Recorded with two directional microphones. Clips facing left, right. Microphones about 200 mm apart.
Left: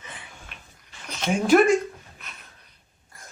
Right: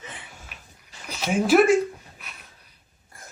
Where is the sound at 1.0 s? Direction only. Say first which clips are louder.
Even; 5° right (ahead or behind).